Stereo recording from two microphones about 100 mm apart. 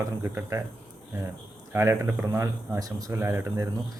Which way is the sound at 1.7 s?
25° right (ahead or behind).